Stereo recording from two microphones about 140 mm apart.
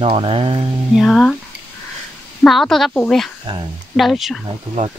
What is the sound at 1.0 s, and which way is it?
Speech, centre (ahead or behind).